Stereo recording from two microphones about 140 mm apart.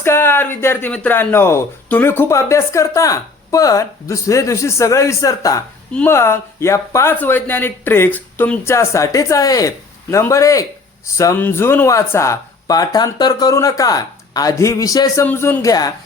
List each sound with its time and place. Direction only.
0.0 s speech: 15° left (ahead or behind)